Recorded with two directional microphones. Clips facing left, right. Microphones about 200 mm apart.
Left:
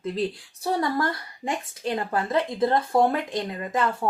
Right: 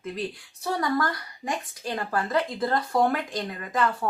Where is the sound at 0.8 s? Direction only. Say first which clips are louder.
Left 1 dB; 25° left (ahead or behind).